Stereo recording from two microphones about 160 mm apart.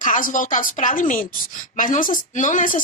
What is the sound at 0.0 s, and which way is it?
A woman's voice, 55° left (ahead or behind).